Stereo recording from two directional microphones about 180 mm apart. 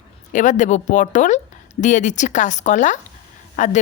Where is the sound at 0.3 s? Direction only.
45° left (ahead or behind).